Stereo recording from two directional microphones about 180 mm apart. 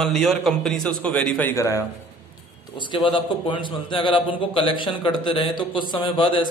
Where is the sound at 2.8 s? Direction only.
25° left (ahead or behind).